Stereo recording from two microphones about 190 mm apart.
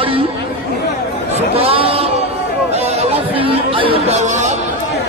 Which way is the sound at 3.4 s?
30° right (ahead or behind).